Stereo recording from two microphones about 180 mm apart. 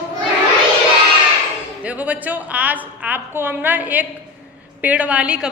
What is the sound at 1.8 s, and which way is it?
A woman's voice, 10° right (ahead or behind).